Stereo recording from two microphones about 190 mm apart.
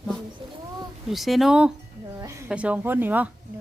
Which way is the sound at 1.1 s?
Centre (ahead or behind).